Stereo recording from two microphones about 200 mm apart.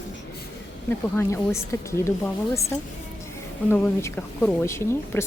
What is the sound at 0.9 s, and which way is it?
Speech, 10° left (ahead or behind).